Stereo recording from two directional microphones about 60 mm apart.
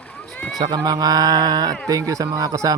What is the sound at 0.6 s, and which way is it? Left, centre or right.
Speech, right.